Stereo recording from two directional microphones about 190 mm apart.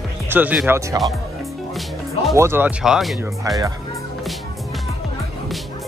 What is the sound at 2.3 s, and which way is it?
Speech, 15° right (ahead or behind).